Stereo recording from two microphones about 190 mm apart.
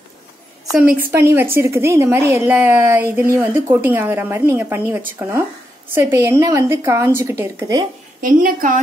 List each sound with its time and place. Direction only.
1.1 s a woman's voice: 15° right (ahead or behind)
8.2 s a woman's voice: 50° right (ahead or behind)